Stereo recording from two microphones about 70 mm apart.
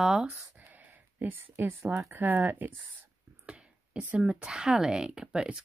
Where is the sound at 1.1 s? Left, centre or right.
Right.